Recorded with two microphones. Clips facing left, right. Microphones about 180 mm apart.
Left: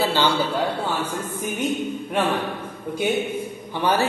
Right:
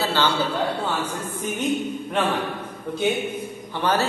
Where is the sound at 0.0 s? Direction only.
15° left (ahead or behind).